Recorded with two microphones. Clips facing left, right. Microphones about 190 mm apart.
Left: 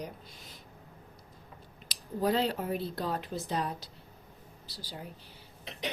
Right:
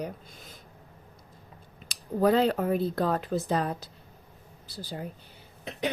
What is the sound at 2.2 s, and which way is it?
Speech, 55° right (ahead or behind).